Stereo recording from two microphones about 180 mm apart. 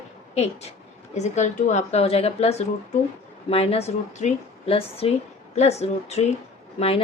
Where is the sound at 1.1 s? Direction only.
40° left (ahead or behind).